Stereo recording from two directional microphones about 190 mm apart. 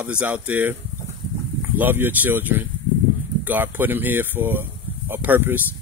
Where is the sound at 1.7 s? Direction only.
10° right (ahead or behind).